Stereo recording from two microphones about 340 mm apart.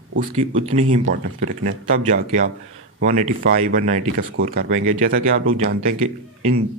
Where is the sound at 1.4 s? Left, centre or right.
Right.